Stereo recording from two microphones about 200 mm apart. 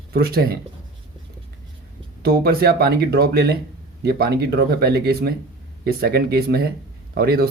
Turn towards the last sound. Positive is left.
turn(degrees=-50)  # may be behind; listen again after turning